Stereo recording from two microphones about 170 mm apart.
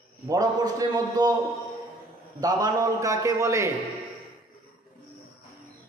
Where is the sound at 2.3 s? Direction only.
25° right (ahead or behind).